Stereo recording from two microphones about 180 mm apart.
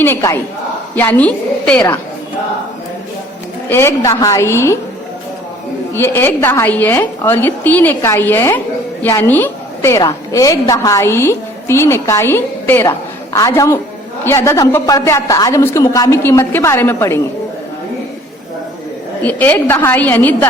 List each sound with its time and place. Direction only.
0.0 s a woman's voice: 15° left (ahead or behind)
3.7 s a woman's voice: 15° left (ahead or behind)
5.9 s a woman's voice: 15° left (ahead or behind)
19.2 s a woman's voice: 10° left (ahead or behind)